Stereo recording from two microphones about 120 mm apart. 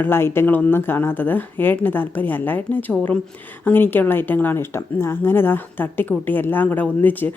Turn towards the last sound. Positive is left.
turn(degrees=15)  # may be behind; listen again after turning